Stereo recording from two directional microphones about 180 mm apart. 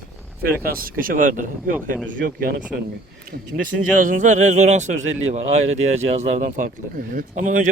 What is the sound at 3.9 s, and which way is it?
Speech, 50° right (ahead or behind).